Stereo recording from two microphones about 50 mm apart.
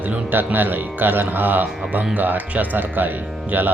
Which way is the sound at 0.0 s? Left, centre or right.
Right.